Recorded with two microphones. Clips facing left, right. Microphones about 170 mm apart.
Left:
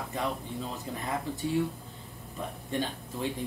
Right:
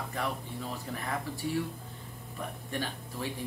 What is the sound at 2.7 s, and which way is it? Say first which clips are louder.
Speech: left 5 dB; 20° left (ahead or behind).